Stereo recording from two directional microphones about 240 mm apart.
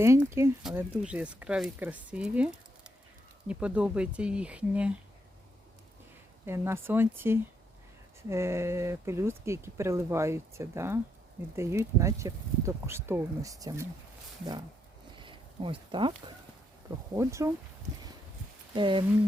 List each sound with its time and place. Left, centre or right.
0.0 s speech: centre
6.4 s speech: centre
15.2 s a sound: right
17.2 s speech: centre
18.7 s speech: centre